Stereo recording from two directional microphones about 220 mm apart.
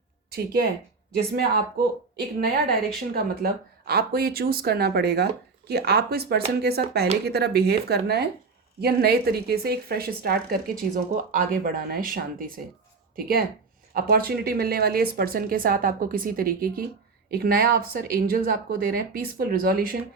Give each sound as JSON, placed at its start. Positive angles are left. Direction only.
{"t": 0.3, "sound": "speech", "side_deg": -45}